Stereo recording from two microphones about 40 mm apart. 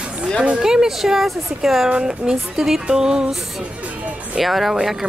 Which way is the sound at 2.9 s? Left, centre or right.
Centre.